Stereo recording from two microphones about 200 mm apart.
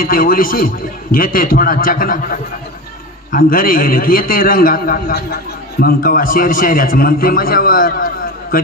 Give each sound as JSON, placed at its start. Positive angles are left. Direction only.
{"t": 0.0, "sound": "a man's voice", "side_deg": 45}